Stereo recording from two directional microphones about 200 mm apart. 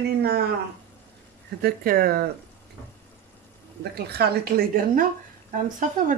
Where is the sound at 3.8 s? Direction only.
55° right (ahead or behind).